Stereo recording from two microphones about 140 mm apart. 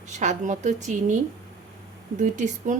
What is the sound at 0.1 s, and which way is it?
A woman's voice, 55° right (ahead or behind).